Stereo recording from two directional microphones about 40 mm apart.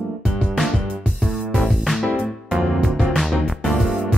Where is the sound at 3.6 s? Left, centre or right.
Centre.